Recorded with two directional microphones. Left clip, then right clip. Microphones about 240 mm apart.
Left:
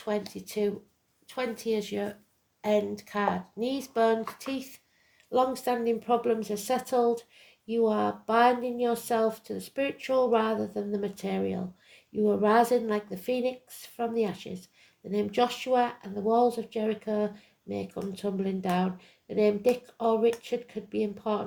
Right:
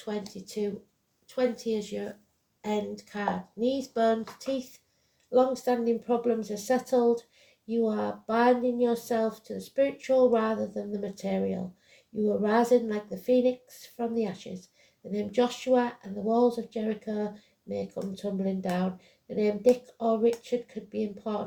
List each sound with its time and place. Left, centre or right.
0.0 s speech: left